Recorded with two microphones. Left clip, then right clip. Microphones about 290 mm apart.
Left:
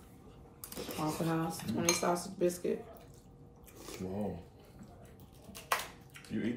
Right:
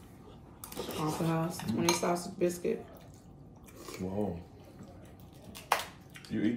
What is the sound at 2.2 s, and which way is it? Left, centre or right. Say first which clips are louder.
Speech: right 1 dB; centre.